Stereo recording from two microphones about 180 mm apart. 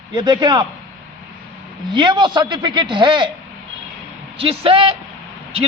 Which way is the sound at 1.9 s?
25° right (ahead or behind).